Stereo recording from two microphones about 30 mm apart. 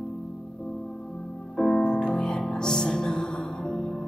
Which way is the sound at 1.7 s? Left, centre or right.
Left.